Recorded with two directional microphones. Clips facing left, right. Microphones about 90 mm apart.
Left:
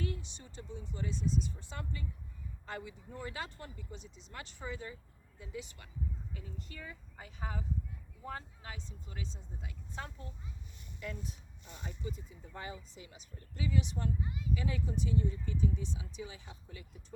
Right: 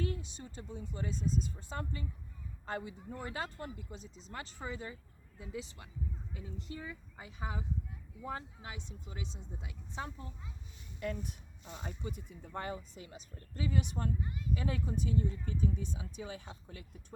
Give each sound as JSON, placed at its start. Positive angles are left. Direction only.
{"t": 0.0, "sound": "a man's voice", "side_deg": -35}
{"t": 11.0, "sound": "speech", "side_deg": -55}